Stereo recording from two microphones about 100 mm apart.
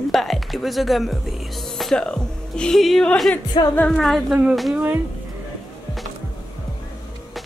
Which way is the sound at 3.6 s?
55° left (ahead or behind).